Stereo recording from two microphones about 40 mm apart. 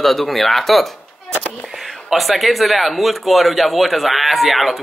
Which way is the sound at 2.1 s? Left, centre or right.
Centre.